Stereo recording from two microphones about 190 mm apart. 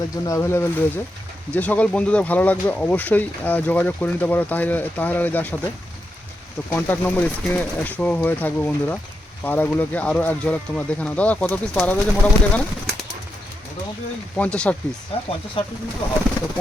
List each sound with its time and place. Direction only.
0.3 s speech: 15° left (ahead or behind)
14.3 s speech: 5° left (ahead or behind)
15.1 s speech: 30° left (ahead or behind)